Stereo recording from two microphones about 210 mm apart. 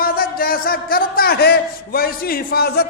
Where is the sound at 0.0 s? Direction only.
45° left (ahead or behind).